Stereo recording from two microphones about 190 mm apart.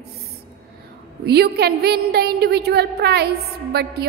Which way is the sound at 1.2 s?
55° right (ahead or behind).